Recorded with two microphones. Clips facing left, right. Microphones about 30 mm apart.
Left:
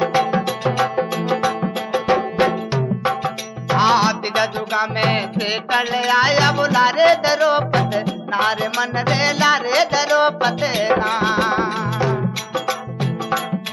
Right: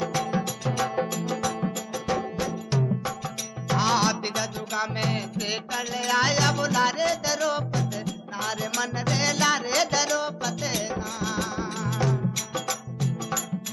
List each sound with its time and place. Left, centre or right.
0.0 s music: left
4.4 s music: left
7.0 s music: left
7.7 s music: left
8.0 s music: left
10.1 s music: left
10.9 s music: left
11.8 s music: left